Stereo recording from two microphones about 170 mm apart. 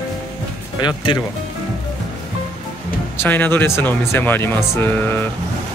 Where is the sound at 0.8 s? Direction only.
25° left (ahead or behind).